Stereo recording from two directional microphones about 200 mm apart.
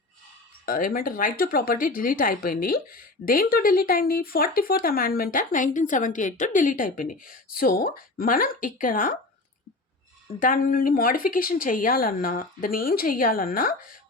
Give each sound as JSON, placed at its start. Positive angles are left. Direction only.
{"t": 0.6, "sound": "speech", "side_deg": 45}
{"t": 10.4, "sound": "speech", "side_deg": 45}